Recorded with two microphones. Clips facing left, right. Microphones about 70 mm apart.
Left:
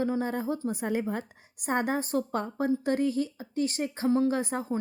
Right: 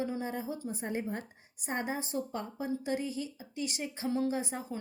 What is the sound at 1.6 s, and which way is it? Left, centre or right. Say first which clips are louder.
A woman's voice: left 7 dB; left.